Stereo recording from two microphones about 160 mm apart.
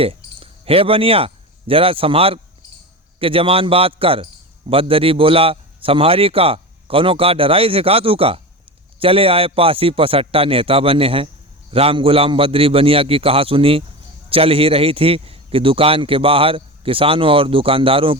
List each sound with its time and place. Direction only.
0.0 s a man's voice: 35° right (ahead or behind)